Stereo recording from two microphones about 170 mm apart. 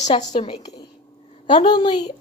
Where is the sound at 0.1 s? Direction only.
35° left (ahead or behind).